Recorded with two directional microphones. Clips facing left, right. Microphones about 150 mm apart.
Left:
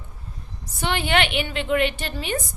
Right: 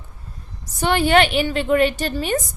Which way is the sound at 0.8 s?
40° right (ahead or behind).